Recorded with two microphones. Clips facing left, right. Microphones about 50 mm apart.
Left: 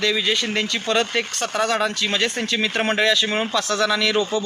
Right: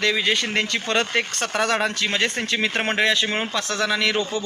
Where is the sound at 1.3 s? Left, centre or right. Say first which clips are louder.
Left 2 dB; right.